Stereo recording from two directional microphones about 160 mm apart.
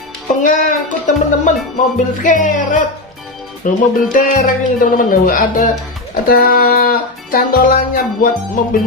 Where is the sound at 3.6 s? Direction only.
60° left (ahead or behind).